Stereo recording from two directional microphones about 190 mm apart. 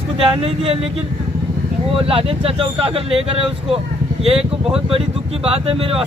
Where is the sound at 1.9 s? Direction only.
30° right (ahead or behind).